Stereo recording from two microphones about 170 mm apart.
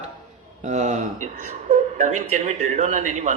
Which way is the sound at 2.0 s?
45° right (ahead or behind).